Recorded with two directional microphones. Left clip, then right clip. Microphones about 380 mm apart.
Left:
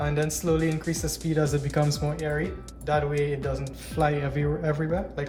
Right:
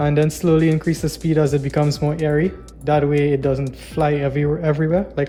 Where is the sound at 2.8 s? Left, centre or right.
Centre.